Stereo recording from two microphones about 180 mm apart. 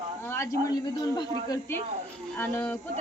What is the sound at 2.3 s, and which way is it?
Speech, 10° left (ahead or behind).